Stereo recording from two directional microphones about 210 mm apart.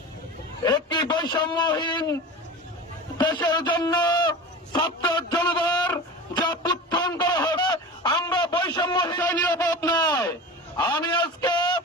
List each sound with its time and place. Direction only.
0.6 s a man's voice: 20° left (ahead or behind)
3.2 s a sound: 20° left (ahead or behind)
8.6 s a man's voice: 20° left (ahead or behind)
9.1 s a man's voice: 10° left (ahead or behind)